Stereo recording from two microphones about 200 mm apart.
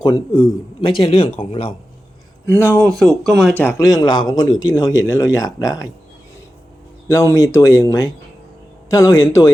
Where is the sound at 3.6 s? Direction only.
15° left (ahead or behind).